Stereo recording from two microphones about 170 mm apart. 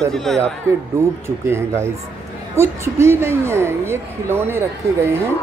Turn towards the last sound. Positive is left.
turn(degrees=-15)  # may be behind; listen again after turning